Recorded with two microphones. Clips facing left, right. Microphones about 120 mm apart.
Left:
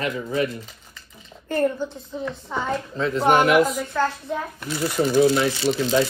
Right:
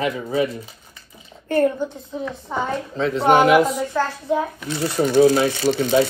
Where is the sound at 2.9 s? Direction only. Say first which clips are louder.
Right 3 dB; 25° right (ahead or behind).